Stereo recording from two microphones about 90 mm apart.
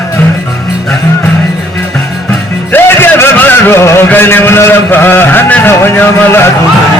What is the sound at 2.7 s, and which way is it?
Music, 25° left (ahead or behind).